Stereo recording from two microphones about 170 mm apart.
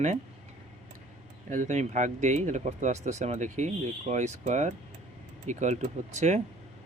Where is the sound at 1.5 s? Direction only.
45° right (ahead or behind).